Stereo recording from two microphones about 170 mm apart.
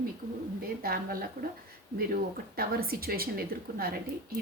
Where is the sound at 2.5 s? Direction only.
65° right (ahead or behind).